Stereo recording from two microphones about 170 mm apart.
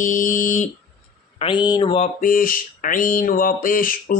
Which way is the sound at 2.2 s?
55° left (ahead or behind).